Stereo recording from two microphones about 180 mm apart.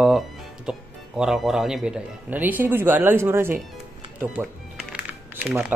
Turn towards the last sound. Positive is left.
turn(degrees=-10)  # may be behind; listen again after turning